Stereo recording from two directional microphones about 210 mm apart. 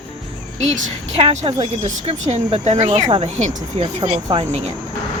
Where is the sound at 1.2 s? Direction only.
30° right (ahead or behind).